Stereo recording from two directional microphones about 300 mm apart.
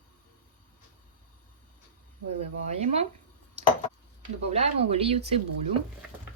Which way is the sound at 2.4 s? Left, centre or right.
Right.